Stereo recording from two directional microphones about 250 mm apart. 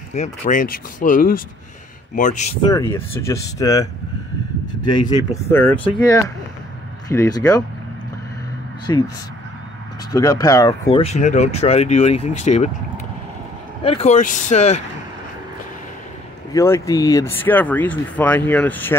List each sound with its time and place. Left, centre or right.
0.1 s speech: left
2.7 s speech: centre
8.8 s speech: centre
10.1 s speech: centre
13.8 s speech: left
16.5 s speech: centre